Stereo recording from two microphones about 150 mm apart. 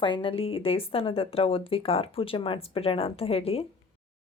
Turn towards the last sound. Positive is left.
turn(degrees=40)  # may be behind; listen again after turning